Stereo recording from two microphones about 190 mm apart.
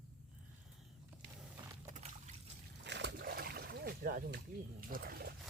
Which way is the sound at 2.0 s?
35° right (ahead or behind).